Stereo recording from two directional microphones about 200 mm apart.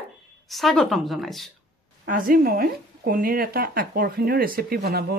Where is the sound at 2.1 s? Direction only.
45° right (ahead or behind).